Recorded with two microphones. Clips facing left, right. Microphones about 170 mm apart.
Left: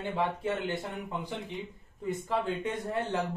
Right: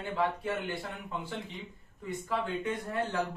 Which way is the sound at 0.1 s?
20° left (ahead or behind).